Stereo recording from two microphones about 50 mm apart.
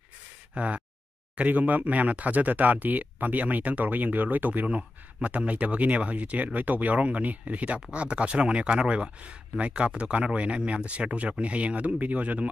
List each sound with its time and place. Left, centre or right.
0.6 s speech: right